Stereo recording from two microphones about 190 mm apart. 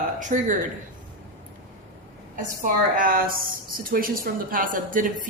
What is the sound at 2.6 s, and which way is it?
A woman's voice, 45° right (ahead or behind).